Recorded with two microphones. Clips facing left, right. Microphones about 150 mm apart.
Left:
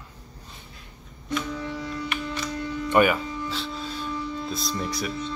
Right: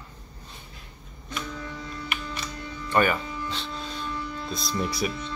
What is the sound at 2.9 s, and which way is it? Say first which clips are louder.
Music: left 3 dB; 10° left (ahead or behind).